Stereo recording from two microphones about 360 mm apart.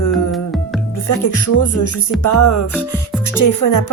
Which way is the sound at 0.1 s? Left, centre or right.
Centre.